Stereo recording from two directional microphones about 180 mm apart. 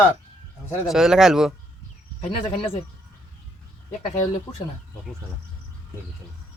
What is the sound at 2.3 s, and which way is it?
Speech, 30° left (ahead or behind).